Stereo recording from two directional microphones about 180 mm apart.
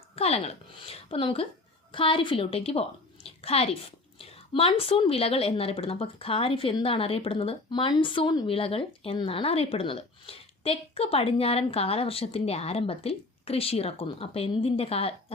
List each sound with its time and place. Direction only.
0.2 s a woman's voice: 35° left (ahead or behind)